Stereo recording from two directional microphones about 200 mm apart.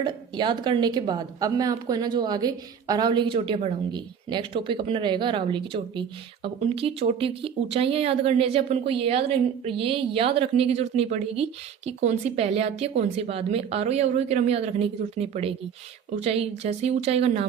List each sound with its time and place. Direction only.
0.0 s a woman's voice: 25° right (ahead or behind)